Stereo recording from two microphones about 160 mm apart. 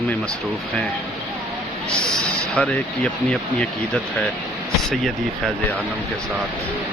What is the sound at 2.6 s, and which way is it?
Speech, 10° left (ahead or behind).